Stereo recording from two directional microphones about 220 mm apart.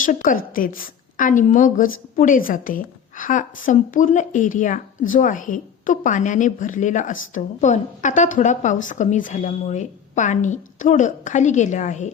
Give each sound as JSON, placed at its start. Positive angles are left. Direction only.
{"t": 0.0, "sound": "a woman's voice", "side_deg": 35}